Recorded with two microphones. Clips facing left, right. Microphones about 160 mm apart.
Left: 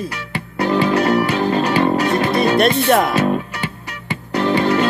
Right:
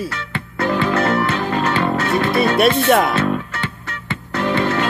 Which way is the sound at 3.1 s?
15° left (ahead or behind).